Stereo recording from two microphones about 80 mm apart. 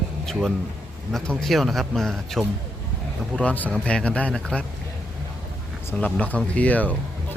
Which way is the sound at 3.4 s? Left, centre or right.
Centre.